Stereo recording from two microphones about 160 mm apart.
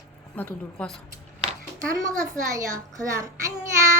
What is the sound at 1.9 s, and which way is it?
A child's voice, 20° right (ahead or behind).